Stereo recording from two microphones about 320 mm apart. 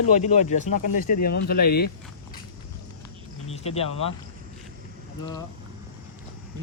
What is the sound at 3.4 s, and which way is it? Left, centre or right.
Speech, centre.